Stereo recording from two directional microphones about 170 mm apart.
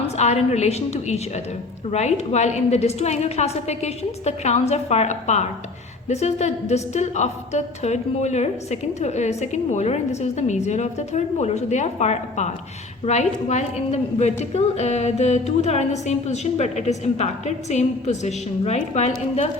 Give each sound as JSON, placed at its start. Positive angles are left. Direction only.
{"t": 0.2, "sound": "a woman's voice", "side_deg": 40}